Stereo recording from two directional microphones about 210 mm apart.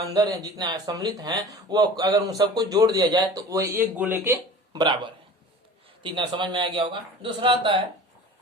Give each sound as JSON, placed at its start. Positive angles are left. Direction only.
{"t": 0.1, "sound": "speech", "side_deg": -15}